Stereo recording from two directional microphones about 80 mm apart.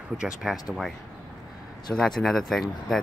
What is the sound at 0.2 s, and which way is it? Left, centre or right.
Speech, centre.